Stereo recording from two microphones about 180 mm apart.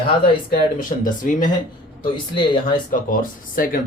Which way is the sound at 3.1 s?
50° left (ahead or behind).